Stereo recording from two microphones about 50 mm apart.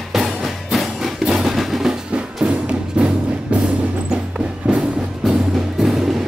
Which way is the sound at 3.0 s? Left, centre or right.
Right.